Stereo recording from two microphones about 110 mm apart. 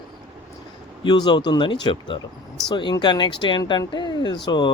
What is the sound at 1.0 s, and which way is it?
A man's voice, 45° left (ahead or behind).